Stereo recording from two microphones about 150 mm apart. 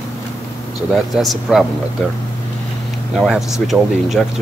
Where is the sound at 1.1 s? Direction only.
Centre (ahead or behind).